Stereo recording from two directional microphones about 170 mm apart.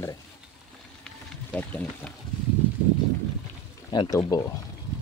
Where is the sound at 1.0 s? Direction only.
5° left (ahead or behind).